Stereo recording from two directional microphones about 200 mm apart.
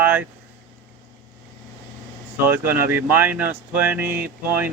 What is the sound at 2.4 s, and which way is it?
Speech, 10° right (ahead or behind).